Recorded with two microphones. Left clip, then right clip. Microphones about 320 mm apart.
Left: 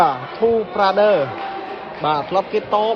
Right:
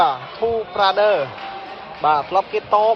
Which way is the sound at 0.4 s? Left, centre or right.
Right.